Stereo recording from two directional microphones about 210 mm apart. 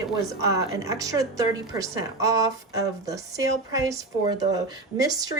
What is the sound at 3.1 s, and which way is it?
Speech, 15° right (ahead or behind).